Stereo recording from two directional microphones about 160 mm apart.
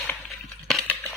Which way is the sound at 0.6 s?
Centre (ahead or behind).